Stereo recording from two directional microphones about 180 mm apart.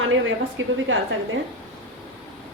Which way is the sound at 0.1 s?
90° right.